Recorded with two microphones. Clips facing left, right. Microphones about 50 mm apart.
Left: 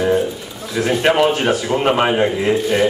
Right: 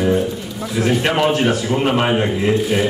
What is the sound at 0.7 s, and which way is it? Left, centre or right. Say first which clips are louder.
Speech: left 2 dB; centre.